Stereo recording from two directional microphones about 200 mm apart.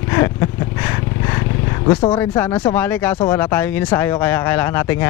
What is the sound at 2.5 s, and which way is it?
Speech, 25° left (ahead or behind).